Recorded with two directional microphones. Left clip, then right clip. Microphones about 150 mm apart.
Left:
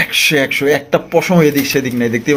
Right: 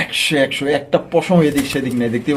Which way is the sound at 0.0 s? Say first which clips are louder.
Left 4 dB; 25° left (ahead or behind).